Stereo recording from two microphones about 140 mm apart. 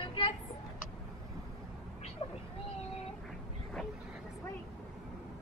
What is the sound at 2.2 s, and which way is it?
Speech, 45° left (ahead or behind).